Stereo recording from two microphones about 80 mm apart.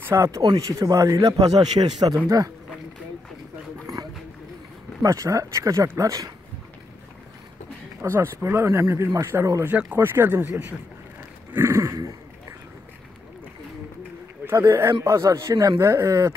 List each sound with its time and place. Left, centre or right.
0.1 s a man's voice: right
3.8 s a sound: right
5.0 s a man's voice: right
8.0 s speech: right
11.5 s dog: right
14.6 s speech: right